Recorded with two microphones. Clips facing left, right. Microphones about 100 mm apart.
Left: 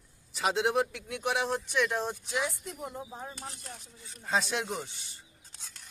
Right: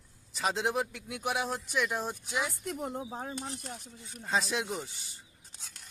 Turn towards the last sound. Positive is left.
turn(degrees=-15)  # may be behind; listen again after turning